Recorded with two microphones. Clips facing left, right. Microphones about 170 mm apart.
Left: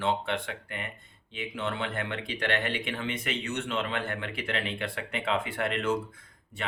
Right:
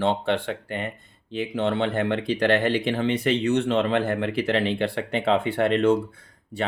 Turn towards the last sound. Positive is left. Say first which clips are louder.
# right 8 dB
turn(degrees=-35)  # may be behind; listen again after turning